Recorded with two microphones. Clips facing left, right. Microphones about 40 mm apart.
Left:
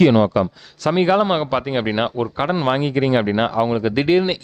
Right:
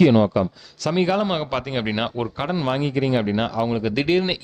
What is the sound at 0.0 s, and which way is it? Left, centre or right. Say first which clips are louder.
Speech: left 2 dB; left.